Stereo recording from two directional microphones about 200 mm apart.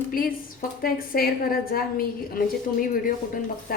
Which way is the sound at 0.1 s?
45° left (ahead or behind).